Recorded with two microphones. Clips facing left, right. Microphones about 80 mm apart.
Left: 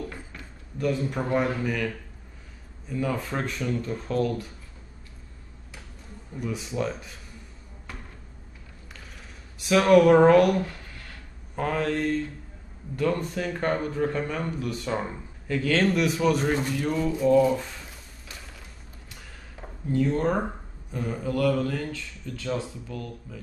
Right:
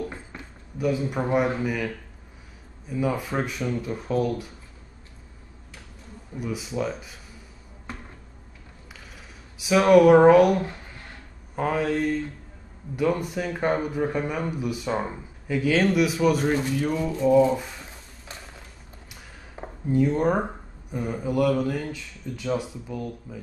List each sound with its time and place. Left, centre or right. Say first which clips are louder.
0.7 s a man's voice: right 2 dB; centre
2.9 s a man's voice: right 2 dB; centre
6.3 s speech: right 1 dB; centre
7.9 s cupboard open or close: right 3 dB; right
9.6 s a man's voice: right 2 dB; centre
10.6 s a sound: right 1 dB; right
11.5 s a man's voice: right 2 dB; centre
19.5 s a man's voice: right 3 dB; centre